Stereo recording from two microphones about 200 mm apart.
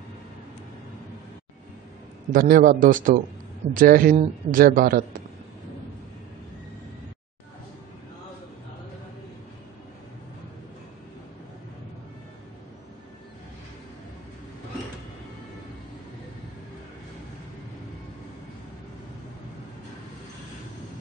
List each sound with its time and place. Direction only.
2.3 s a man's voice: 45° right (ahead or behind)